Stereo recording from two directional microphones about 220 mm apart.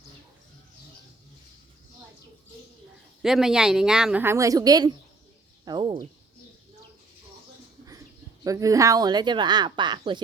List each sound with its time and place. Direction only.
3.2 s speech: centre (ahead or behind); by 6.1 s 20° right (ahead or behind)
8.4 s speech: 15° right (ahead or behind)